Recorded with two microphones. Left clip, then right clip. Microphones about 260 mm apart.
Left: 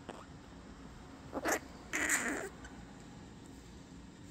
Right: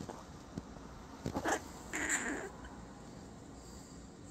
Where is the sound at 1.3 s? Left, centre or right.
Left.